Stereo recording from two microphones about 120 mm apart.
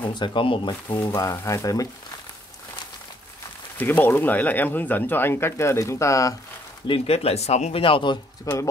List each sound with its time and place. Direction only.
0.0 s speech: 40° left (ahead or behind)
1.1 s speech: 25° left (ahead or behind)
3.7 s speech: 15° left (ahead or behind)
6.9 s speech: 55° left (ahead or behind)
8.5 s speech: 30° left (ahead or behind)